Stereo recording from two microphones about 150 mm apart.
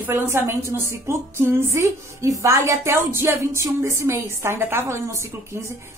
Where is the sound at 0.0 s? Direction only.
15° right (ahead or behind).